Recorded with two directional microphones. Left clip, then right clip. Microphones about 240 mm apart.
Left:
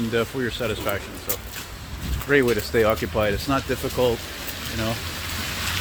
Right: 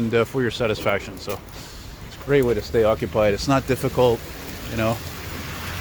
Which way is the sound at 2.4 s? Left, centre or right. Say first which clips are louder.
Right 1 dB; centre.